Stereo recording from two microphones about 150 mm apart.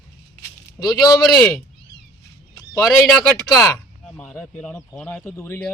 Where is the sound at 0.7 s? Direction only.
20° left (ahead or behind).